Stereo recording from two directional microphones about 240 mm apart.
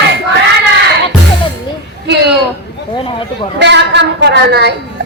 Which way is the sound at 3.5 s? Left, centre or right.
Right.